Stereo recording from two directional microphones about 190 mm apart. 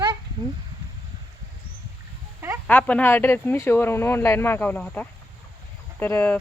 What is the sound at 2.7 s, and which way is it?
Speech, 10° left (ahead or behind).